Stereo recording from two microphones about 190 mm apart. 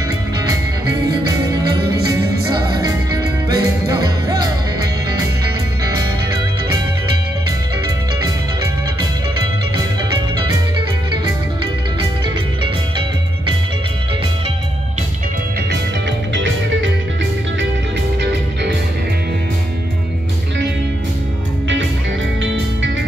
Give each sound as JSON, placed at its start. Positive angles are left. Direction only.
{"t": 0.5, "sound": "music", "side_deg": -20}
{"t": 16.3, "sound": "music", "side_deg": -80}
{"t": 18.2, "sound": "music", "side_deg": -65}